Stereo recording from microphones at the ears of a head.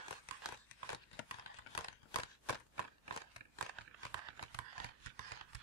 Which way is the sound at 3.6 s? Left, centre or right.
Right.